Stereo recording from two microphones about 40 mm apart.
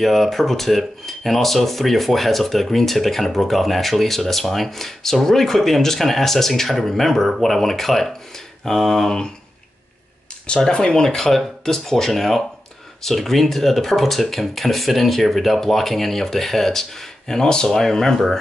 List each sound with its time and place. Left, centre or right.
0.0 s speech: centre
10.7 s speech: centre